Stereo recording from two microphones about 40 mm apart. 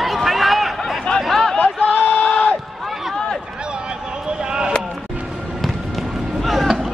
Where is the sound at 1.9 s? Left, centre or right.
Left.